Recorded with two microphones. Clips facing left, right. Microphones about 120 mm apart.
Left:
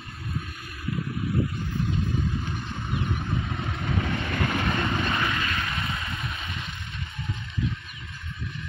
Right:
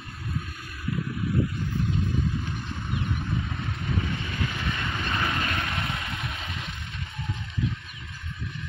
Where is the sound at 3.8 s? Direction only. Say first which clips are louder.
Left 2 dB; 70° left (ahead or behind).